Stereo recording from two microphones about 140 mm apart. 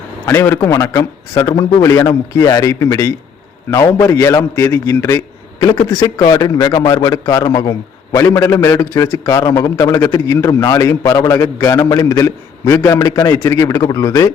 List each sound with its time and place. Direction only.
0.3 s a man's voice: 20° left (ahead or behind)